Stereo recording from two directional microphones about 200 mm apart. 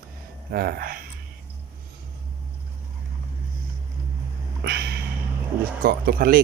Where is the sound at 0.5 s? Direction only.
50° right (ahead or behind).